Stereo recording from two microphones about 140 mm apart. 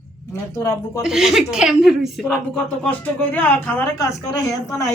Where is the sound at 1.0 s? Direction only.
Centre (ahead or behind).